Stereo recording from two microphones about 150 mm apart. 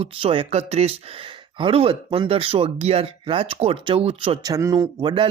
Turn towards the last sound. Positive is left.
turn(degrees=-30)  # may be behind; listen again after turning